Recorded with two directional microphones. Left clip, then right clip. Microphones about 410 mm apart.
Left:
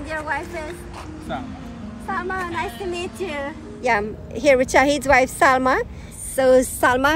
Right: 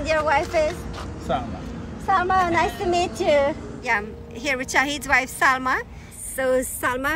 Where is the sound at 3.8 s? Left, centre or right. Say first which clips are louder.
Left 4 dB; centre.